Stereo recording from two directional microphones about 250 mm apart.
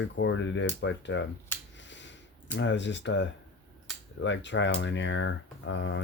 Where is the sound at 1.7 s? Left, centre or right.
Left.